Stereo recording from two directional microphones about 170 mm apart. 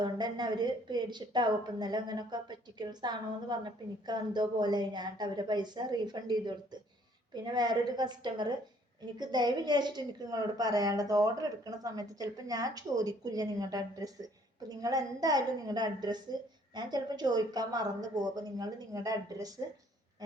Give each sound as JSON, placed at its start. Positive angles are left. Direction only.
{"t": 0.0, "sound": "a woman's voice", "side_deg": -25}